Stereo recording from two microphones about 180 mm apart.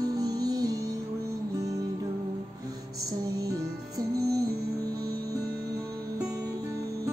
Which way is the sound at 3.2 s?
20° right (ahead or behind).